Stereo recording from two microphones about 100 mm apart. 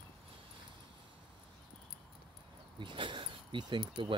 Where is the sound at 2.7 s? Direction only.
55° right (ahead or behind).